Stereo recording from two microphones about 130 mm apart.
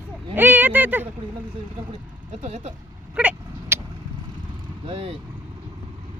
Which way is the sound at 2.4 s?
60° right (ahead or behind).